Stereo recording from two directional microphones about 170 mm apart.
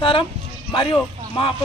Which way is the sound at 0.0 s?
30° left (ahead or behind).